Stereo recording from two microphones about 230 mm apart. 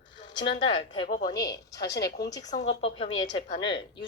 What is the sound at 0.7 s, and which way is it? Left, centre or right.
Speech, left.